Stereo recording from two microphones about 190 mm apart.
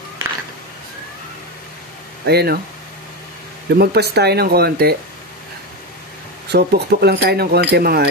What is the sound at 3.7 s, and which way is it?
Speech, 60° right (ahead or behind).